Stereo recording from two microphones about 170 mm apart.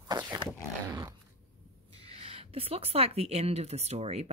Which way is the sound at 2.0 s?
35° right (ahead or behind).